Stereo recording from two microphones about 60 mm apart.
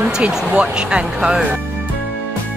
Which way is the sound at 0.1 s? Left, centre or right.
Centre.